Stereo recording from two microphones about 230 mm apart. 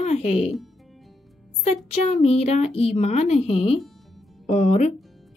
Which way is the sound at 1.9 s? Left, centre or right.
Left.